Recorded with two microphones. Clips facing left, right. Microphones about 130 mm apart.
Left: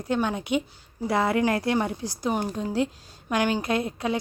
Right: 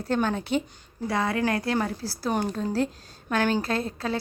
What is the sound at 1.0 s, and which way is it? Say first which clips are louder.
Speech: left 3 dB; 25° left (ahead or behind).